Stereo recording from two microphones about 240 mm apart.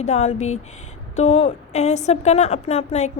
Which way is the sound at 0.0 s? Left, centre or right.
Left.